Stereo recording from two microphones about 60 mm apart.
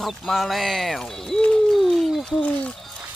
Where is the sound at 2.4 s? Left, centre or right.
Centre.